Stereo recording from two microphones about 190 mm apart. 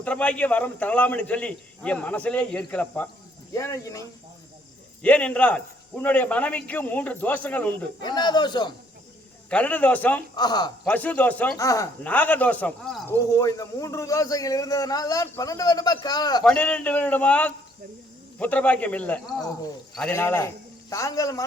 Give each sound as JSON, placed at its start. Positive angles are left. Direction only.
{"t": 0.0, "sound": "a man's voice", "side_deg": 5}
{"t": 5.0, "sound": "a man's voice", "side_deg": 5}
{"t": 8.0, "sound": "speech", "side_deg": 20}
{"t": 9.5, "sound": "a man's voice", "side_deg": 5}
{"t": 10.3, "sound": "speech", "side_deg": 20}
{"t": 10.8, "sound": "a man's voice", "side_deg": 10}
{"t": 13.1, "sound": "a man's voice", "side_deg": 15}
{"t": 16.4, "sound": "a man's voice", "side_deg": 5}